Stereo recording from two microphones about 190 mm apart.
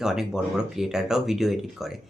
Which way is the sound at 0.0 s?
5° right (ahead or behind).